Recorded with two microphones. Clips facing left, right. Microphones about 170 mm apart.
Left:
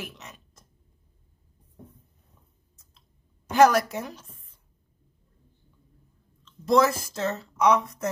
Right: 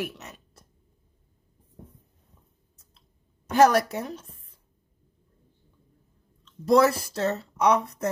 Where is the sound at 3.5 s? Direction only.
30° right (ahead or behind).